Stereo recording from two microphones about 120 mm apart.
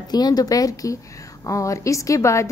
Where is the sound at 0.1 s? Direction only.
35° left (ahead or behind).